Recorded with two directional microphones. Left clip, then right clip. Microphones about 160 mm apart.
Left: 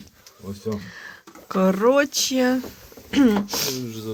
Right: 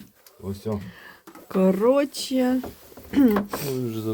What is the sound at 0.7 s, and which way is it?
Speech, 10° right (ahead or behind).